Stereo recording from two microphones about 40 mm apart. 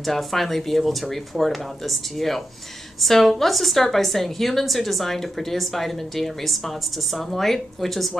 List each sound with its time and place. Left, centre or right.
0.0 s a woman's voice: centre